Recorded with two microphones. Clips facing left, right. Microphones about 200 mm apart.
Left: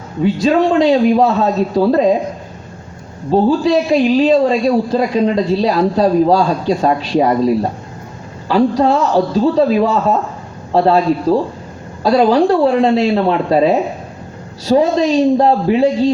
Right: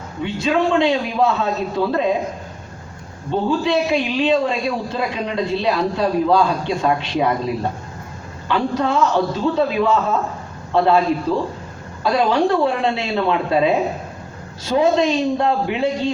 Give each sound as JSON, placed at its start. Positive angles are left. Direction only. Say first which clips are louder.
{"t": 0.2, "sound": "a man's voice", "louder": "left 7 dB", "side_deg": 35}
{"t": 3.2, "sound": "a man's voice", "louder": "left 7 dB", "side_deg": 35}